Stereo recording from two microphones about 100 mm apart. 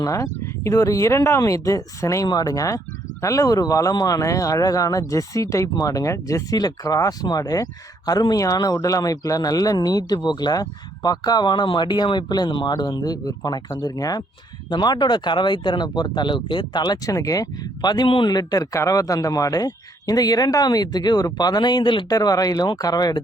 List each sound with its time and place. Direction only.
0.0 s speech: 30° left (ahead or behind)
2.2 s speech: 40° left (ahead or behind)
22.1 s speech: 40° left (ahead or behind)